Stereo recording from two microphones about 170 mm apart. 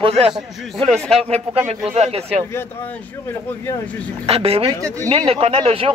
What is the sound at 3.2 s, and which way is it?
Speech, 15° left (ahead or behind).